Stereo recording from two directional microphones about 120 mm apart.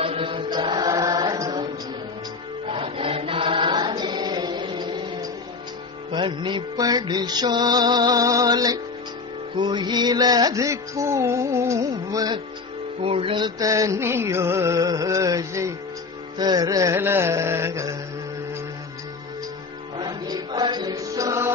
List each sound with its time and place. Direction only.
0.0 s music: 50° right (ahead or behind); by 1.7 s 30° right (ahead or behind)
2.7 s chant: 50° right (ahead or behind)
3.8 s music: 35° right (ahead or behind)
13.0 s music: 50° right (ahead or behind)
13.6 s music: 30° right (ahead or behind)
20.0 s music: 35° right (ahead or behind)